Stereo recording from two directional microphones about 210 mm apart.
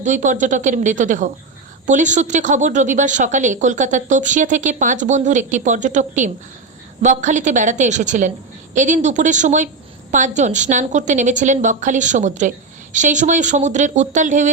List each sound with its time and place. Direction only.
0.0 s a woman's voice: 35° right (ahead or behind)